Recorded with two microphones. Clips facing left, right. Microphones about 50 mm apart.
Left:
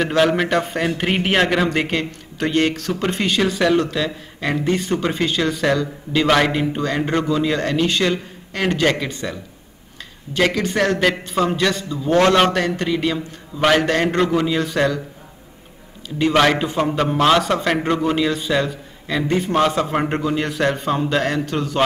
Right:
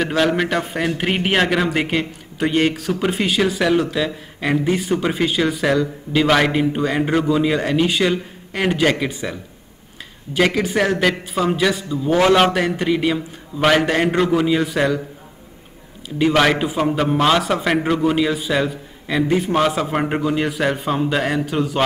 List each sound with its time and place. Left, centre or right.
0.0 s a man's voice: centre
16.2 s a man's voice: centre